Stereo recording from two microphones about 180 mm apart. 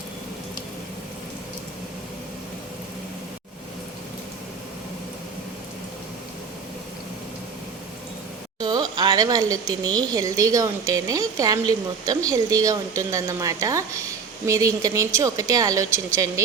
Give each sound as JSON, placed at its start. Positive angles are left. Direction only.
{"t": 8.5, "sound": "speech", "side_deg": -25}